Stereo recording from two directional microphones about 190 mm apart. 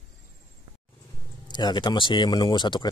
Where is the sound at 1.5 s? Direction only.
20° left (ahead or behind).